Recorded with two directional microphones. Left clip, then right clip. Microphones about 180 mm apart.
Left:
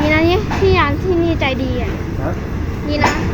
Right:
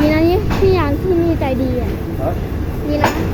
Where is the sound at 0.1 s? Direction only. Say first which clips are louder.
Even; 35° right (ahead or behind).